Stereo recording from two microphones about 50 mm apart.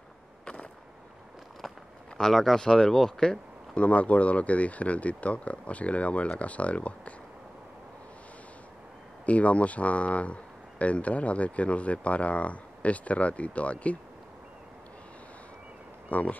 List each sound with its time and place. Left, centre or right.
2.1 s speech: centre
3.7 s speech: left
9.2 s speech: left
16.1 s speech: left